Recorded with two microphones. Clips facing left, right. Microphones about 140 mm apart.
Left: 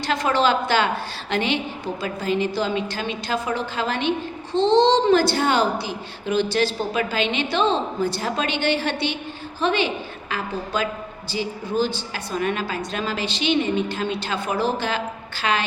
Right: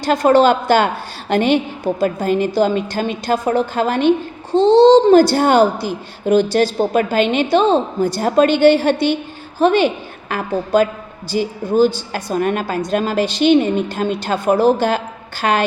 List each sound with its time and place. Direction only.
0.0 s a woman's voice: 45° right (ahead or behind)